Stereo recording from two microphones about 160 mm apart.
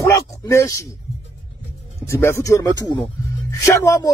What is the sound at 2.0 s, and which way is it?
Speech, 15° left (ahead or behind).